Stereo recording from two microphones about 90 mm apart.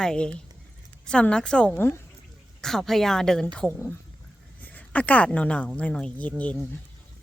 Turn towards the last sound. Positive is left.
turn(degrees=15)  # may be behind; listen again after turning